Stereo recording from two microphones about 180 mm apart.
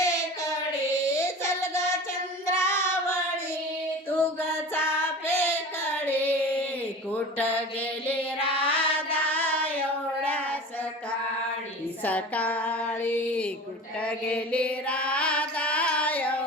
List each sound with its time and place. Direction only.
0.0 s child singing: 15° left (ahead or behind)
2.5 s singing: 15° left (ahead or behind)
4.4 s child singing: 10° left (ahead or behind)
7.1 s mantra: 10° left (ahead or behind)
8.4 s mantra: 30° left (ahead or behind)
8.7 s music: 10° left (ahead or behind)
10.2 s child singing: 10° left (ahead or behind)
12.0 s female singing: 10° left (ahead or behind)
14.0 s mantra: 5° left (ahead or behind)